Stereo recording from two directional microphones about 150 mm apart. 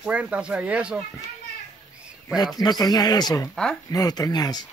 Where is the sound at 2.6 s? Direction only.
25° left (ahead or behind).